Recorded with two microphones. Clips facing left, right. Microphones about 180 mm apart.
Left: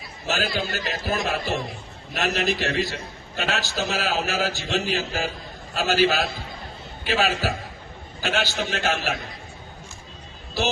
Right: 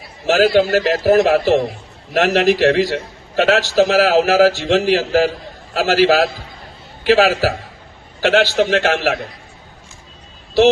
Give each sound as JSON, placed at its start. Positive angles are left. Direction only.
{"t": 0.3, "sound": "a man's voice", "side_deg": -75}
{"t": 2.1, "sound": "a man's voice", "side_deg": -90}